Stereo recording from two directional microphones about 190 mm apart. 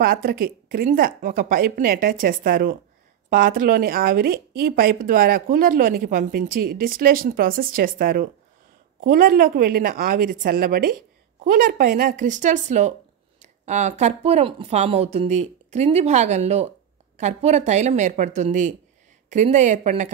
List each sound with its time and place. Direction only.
0.0 s a woman's voice: 50° right (ahead or behind)